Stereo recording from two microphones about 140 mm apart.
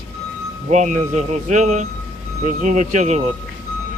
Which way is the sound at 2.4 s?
65° right (ahead or behind).